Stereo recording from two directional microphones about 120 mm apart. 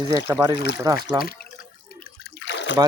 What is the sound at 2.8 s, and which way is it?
Speech, 30° right (ahead or behind).